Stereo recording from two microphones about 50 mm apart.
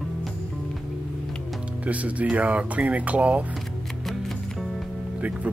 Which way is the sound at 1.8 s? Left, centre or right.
Right.